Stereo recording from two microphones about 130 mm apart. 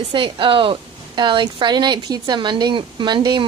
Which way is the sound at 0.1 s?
40° right (ahead or behind).